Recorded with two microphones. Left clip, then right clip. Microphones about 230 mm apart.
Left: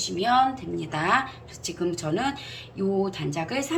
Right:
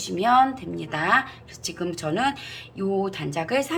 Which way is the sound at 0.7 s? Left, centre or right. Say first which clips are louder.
Right 3 dB; centre.